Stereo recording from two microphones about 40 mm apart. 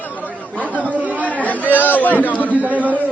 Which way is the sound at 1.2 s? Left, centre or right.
Left.